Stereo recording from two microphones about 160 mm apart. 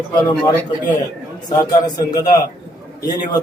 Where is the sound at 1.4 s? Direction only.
25° left (ahead or behind).